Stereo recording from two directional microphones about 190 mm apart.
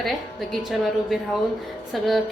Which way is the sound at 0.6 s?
Centre (ahead or behind).